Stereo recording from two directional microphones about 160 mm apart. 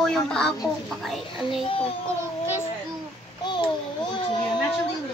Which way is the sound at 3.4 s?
30° left (ahead or behind).